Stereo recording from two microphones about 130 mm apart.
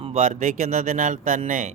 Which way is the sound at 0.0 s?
60° right (ahead or behind).